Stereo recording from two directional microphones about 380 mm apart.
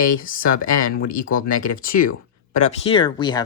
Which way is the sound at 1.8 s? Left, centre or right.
Left.